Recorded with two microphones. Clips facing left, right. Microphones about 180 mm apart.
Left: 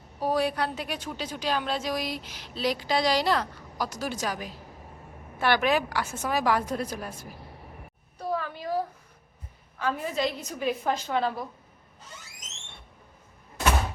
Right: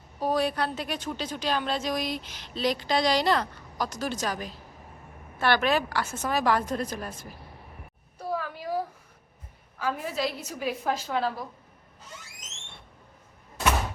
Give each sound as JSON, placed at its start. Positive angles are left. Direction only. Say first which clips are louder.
{"t": 0.2, "sound": "a woman's voice", "louder": "even", "side_deg": 10}
{"t": 8.2, "sound": "a sound", "louder": "left 1 dB", "side_deg": -10}
{"t": 9.7, "sound": "a woman's voice", "louder": "left 1 dB", "side_deg": -5}